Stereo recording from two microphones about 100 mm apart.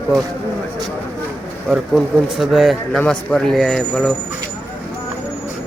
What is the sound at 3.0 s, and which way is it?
Speech, 20° left (ahead or behind).